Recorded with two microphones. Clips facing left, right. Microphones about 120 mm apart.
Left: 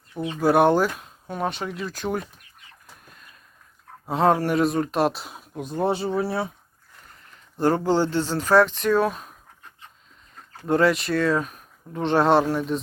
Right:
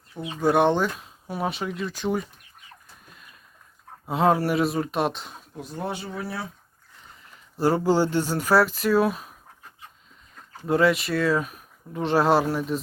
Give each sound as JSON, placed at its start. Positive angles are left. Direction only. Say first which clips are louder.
{"t": 0.1, "sound": "speech", "louder": "left 2 dB", "side_deg": 0}
{"t": 4.0, "sound": "speech", "louder": "left 1 dB", "side_deg": -5}
{"t": 5.5, "sound": "speech", "louder": "left 8 dB", "side_deg": 25}
{"t": 7.5, "sound": "speech", "louder": "even", "side_deg": -10}
{"t": 10.7, "sound": "speech", "louder": "left 1 dB", "side_deg": 0}